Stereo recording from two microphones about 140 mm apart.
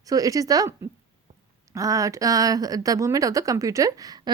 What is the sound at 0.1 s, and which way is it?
Speech, 25° right (ahead or behind).